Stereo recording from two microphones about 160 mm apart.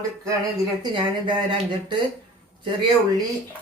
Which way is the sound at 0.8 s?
30° right (ahead or behind).